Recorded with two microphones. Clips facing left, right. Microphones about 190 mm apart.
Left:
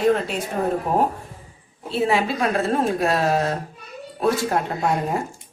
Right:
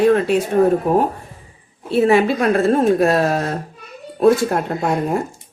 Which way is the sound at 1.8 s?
55° right (ahead or behind).